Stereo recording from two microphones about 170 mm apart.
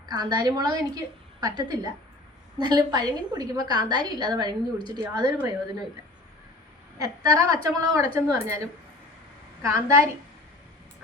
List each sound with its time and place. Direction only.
0.1 s a woman's voice: 25° right (ahead or behind)
7.0 s a woman's voice: 20° right (ahead or behind)
9.6 s a woman's voice: 15° right (ahead or behind)